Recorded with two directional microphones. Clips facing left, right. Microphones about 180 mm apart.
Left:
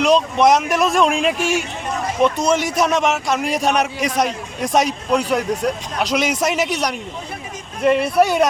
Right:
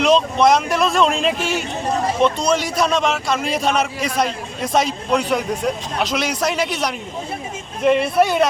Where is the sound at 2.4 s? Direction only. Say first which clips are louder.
Left 1 dB; 20° left (ahead or behind).